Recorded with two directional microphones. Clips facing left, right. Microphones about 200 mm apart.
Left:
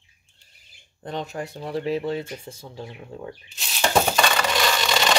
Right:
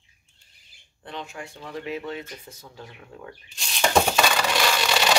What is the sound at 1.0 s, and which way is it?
Speech, 40° left (ahead or behind).